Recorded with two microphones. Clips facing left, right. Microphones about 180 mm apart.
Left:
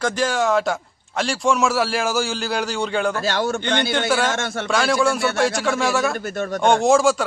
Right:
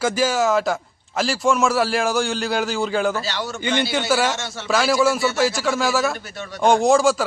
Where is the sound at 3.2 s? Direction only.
50° left (ahead or behind).